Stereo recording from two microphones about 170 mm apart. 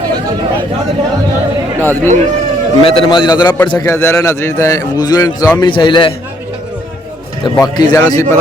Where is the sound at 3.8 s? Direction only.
15° left (ahead or behind).